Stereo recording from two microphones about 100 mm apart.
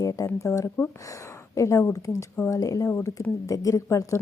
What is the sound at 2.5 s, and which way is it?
Speech, 35° left (ahead or behind).